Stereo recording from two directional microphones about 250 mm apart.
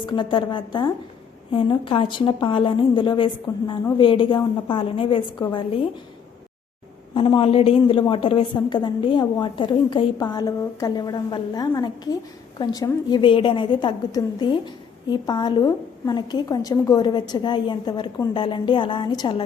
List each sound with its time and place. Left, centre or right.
0.0 s a woman's voice: centre
7.1 s a woman's voice: left